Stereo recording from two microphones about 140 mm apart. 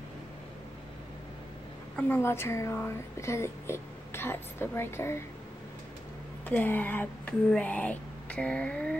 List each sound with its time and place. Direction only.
2.0 s speech: 15° left (ahead or behind)
6.4 s speech: 10° left (ahead or behind)